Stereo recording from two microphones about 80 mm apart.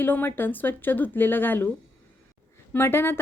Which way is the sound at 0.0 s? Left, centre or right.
Left.